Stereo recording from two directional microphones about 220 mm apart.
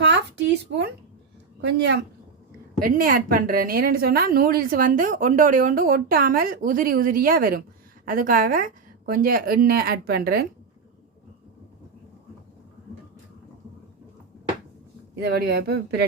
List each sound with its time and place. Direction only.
0.0 s a sound: 55° right (ahead or behind)
1.6 s speech: 50° right (ahead or behind)
2.8 s a woman's voice: 40° right (ahead or behind)
15.2 s speech: 50° right (ahead or behind)